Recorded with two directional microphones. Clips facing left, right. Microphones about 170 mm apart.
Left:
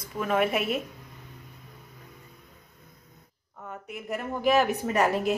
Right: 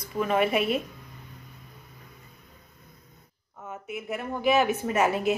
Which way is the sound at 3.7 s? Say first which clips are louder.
Right 1 dB; 5° right (ahead or behind).